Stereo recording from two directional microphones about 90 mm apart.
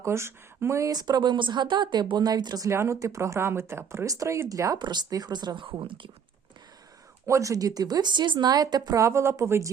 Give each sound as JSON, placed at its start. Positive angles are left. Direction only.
{"t": 0.0, "sound": "speech", "side_deg": -30}
{"t": 0.9, "sound": "speech", "side_deg": -50}
{"t": 2.6, "sound": "speech", "side_deg": -30}
{"t": 4.8, "sound": "speech", "side_deg": -55}
{"t": 5.6, "sound": "speech", "side_deg": -70}
{"t": 7.3, "sound": "speech", "side_deg": -35}
{"t": 9.0, "sound": "speech", "side_deg": -30}